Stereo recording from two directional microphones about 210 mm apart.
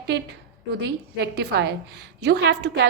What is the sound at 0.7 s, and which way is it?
A woman's voice, 50° right (ahead or behind).